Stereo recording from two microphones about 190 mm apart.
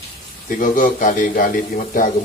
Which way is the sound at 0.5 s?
45° left (ahead or behind).